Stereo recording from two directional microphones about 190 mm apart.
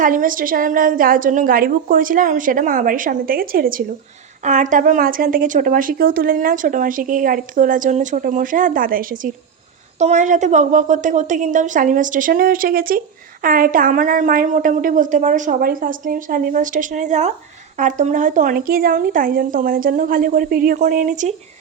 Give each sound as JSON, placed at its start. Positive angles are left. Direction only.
{"t": 0.0, "sound": "a woman's voice", "side_deg": -45}